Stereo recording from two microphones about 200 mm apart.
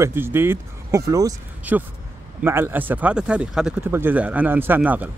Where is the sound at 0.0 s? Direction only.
10° right (ahead or behind).